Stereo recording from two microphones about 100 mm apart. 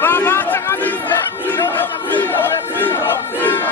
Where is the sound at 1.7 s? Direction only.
20° left (ahead or behind).